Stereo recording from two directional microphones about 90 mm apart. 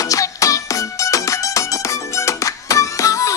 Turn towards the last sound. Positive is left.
turn(degrees=40)  # may be behind; listen again after turning